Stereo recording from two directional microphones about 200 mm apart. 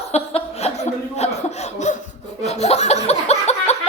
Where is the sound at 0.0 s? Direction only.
30° left (ahead or behind).